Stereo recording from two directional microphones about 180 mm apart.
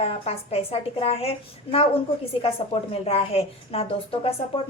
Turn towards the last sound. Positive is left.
turn(degrees=30)  # may be behind; listen again after turning